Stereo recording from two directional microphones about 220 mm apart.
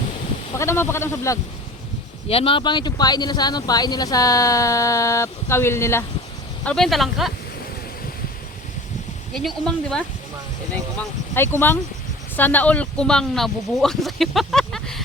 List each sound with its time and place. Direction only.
0.5 s speech: 10° left (ahead or behind)
2.2 s speech: 25° left (ahead or behind); by 7.3 s centre (ahead or behind)
9.3 s speech: centre (ahead or behind)
11.3 s speech: 10° left (ahead or behind)